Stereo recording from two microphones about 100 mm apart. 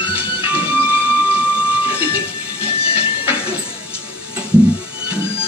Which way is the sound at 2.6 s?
70° left (ahead or behind).